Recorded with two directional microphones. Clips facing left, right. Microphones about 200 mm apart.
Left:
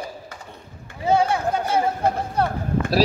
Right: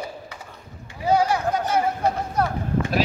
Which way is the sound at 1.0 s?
25° left (ahead or behind).